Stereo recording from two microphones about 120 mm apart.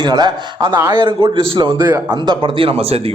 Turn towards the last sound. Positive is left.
turn(degrees=-55)  # may be behind; listen again after turning